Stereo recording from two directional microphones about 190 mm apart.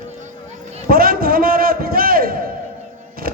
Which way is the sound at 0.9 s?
50° right (ahead or behind).